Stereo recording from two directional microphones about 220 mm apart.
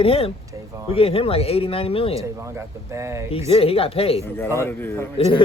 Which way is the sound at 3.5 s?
25° left (ahead or behind).